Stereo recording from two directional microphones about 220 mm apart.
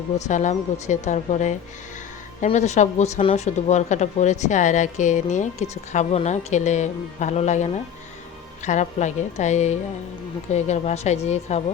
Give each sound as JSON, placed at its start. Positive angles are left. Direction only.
{"t": 0.3, "sound": "speech", "side_deg": 35}